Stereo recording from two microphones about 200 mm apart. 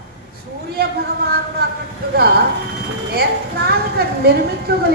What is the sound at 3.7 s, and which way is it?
Speech, 50° right (ahead or behind).